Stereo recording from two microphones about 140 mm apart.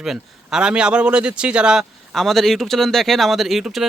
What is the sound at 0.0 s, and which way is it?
Speech, 5° right (ahead or behind).